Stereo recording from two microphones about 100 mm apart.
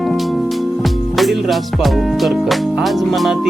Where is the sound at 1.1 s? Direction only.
Centre (ahead or behind).